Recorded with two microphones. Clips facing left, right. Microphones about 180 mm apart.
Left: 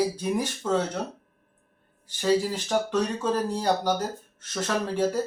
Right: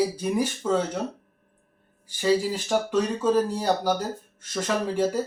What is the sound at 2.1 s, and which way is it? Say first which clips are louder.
Speech: right 1 dB; 10° right (ahead or behind).